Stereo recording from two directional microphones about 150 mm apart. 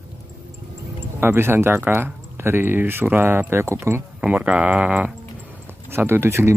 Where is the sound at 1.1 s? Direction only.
15° right (ahead or behind).